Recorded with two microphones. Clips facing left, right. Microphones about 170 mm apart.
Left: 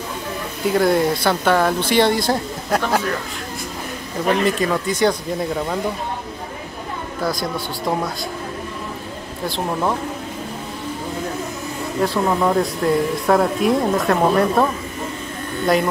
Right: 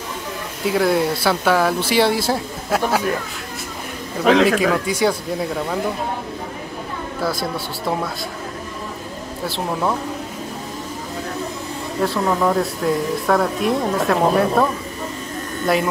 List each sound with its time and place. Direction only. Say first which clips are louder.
0.7 s speech: left 1 dB; centre (ahead or behind)
4.2 s a man's voice: right 4 dB; 90° right
4.8 s speech: left 1 dB; 5° right (ahead or behind)
7.2 s speech: left 1 dB; 5° right (ahead or behind)
9.5 s speech: left 1 dB; centre (ahead or behind)
12.0 s speech: even; centre (ahead or behind)